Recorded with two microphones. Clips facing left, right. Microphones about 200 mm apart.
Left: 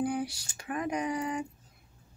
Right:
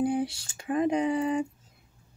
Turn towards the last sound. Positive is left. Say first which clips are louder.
# right 6 dB
turn(degrees=-25)  # may be behind; listen again after turning